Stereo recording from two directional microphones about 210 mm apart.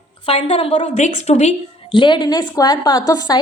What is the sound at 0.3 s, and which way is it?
A woman's voice, 25° left (ahead or behind).